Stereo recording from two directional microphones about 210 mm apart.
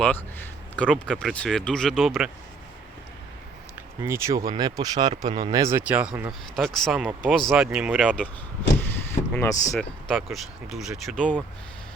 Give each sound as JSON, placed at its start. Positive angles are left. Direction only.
{"t": 0.0, "sound": "speech", "side_deg": 10}
{"t": 4.0, "sound": "speech", "side_deg": -15}
{"t": 8.8, "sound": "a sound", "side_deg": 10}
{"t": 10.1, "sound": "speech", "side_deg": 0}